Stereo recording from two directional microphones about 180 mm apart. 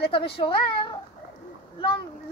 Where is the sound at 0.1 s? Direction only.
30° left (ahead or behind).